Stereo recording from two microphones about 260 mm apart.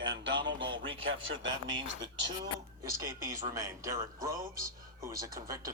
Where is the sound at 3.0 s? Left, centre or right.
Centre.